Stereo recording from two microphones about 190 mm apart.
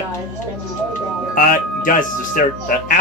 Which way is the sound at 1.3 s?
45° left (ahead or behind).